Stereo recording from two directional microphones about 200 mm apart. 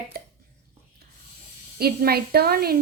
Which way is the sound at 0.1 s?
50° right (ahead or behind).